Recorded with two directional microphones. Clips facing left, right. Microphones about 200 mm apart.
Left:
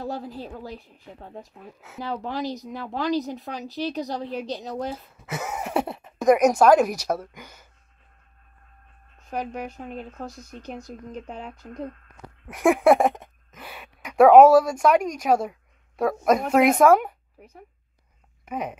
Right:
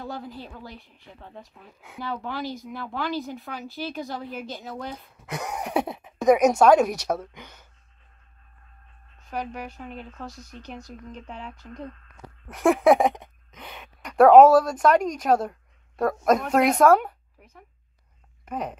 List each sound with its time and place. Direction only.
0.0 s speech: 35° left (ahead or behind)
4.9 s speech: centre (ahead or behind)
9.8 s speech: 40° left (ahead or behind)
12.4 s a woman's voice: 10° left (ahead or behind)
16.7 s speech: 10° left (ahead or behind)
17.4 s speech: 35° left (ahead or behind)
18.4 s speech: 5° left (ahead or behind)